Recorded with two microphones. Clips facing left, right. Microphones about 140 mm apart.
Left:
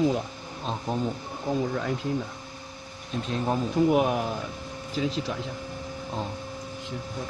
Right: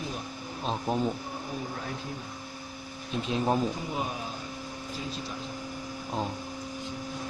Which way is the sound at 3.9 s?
70° left (ahead or behind).